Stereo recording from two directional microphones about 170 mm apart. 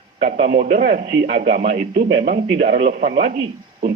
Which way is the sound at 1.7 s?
75° right (ahead or behind).